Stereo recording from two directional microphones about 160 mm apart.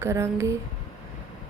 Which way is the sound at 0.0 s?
15° right (ahead or behind).